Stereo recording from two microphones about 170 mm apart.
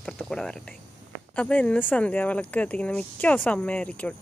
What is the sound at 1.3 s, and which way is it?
Speech, 5° left (ahead or behind).